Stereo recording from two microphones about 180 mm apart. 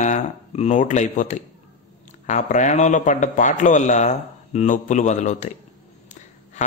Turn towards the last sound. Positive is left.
turn(degrees=40)  # may be behind; listen again after turning